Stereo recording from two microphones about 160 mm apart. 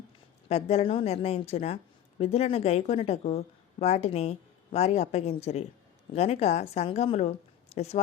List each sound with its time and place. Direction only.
0.4 s a woman's voice: 40° left (ahead or behind)